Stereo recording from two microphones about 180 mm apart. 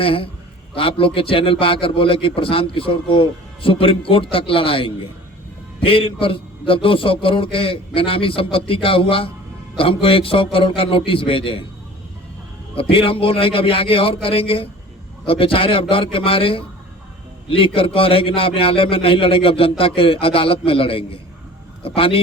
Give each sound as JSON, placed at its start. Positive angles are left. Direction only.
{"t": 0.0, "sound": "a man's voice", "side_deg": 30}
{"t": 12.7, "sound": "a man's voice", "side_deg": 30}